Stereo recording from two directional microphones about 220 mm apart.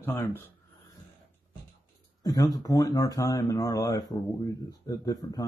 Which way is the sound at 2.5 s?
15° left (ahead or behind).